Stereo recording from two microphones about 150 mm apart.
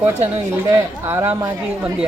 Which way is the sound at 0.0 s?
15° right (ahead or behind).